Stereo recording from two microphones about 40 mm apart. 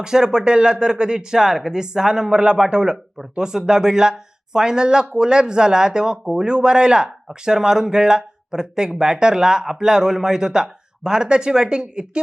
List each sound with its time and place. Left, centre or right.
0.0 s speech: centre